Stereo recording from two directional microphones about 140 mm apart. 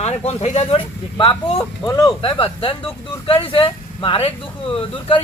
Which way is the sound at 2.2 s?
40° left (ahead or behind).